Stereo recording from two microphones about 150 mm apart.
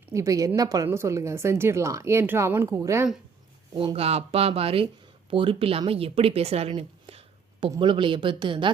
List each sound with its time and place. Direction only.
0.1 s a woman's voice: 20° right (ahead or behind)
3.8 s speech: 40° right (ahead or behind)